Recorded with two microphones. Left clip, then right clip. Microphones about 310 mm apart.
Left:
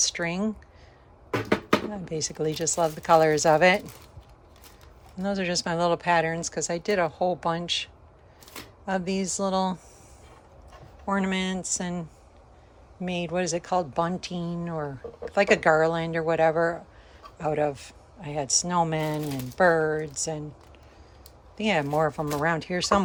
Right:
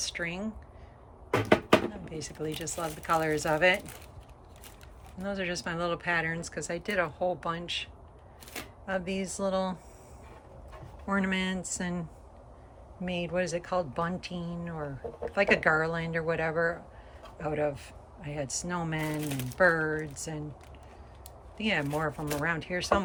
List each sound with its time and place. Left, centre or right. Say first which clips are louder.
0.0 s speech: left 7 dB; centre
2.0 s speech: left 8 dB; centre
5.2 s speech: left 6 dB; centre
11.0 s speech: left 3 dB; centre
13.1 s speech: left 3 dB; centre
21.6 s speech: left 6 dB; centre